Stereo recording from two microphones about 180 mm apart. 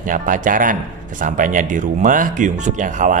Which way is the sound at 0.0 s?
50° right (ahead or behind).